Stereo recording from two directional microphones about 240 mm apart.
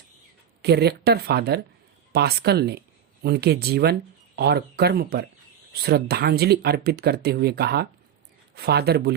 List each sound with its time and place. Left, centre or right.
0.6 s speech: right